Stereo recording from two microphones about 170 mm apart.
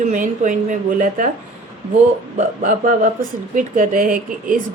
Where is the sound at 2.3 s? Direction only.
45° right (ahead or behind).